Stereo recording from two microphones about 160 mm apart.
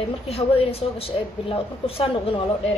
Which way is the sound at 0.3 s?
40° left (ahead or behind).